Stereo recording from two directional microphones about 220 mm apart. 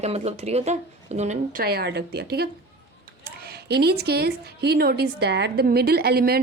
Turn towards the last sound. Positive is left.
turn(degrees=-45)  # may be behind; listen again after turning